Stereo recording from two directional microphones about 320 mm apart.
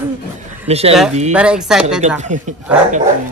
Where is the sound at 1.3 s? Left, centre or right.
Centre.